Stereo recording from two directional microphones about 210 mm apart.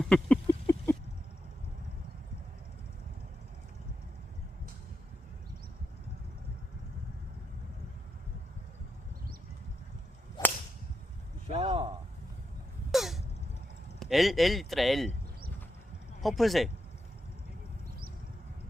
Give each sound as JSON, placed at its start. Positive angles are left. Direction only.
{"t": 0.0, "sound": "a sound", "side_deg": 5}
{"t": 10.4, "sound": "whip", "side_deg": 20}
{"t": 11.4, "sound": "a sound", "side_deg": -30}
{"t": 12.9, "sound": "cough", "side_deg": 0}
{"t": 14.0, "sound": "a man's voice", "side_deg": 0}
{"t": 16.2, "sound": "a man's voice", "side_deg": 0}